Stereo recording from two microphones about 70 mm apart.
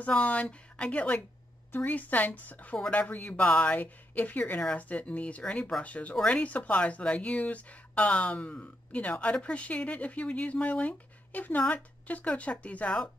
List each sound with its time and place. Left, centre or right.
0.0 s speech: centre